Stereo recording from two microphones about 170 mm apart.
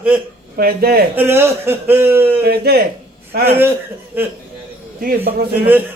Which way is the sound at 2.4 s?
65° right (ahead or behind).